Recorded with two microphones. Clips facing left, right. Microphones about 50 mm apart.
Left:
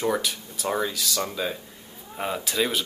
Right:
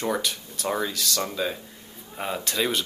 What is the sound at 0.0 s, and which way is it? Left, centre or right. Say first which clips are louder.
Speech: left 1 dB; centre.